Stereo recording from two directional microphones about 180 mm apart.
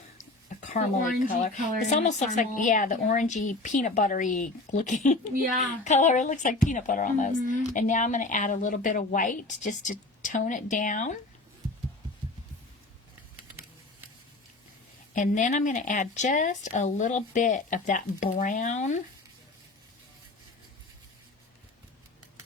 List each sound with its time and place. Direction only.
0.4 s speech: 45° left (ahead or behind)
15.1 s speech: 45° left (ahead or behind)